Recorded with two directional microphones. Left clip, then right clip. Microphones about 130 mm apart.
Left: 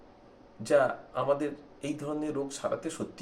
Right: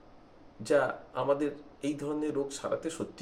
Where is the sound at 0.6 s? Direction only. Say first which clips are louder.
Left 2 dB; 5° right (ahead or behind).